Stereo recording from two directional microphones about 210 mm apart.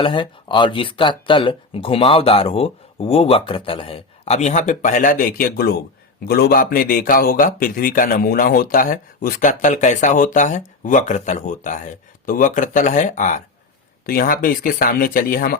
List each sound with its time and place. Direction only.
0.0 s speech: 25° left (ahead or behind); by 15.5 s 45° left (ahead or behind)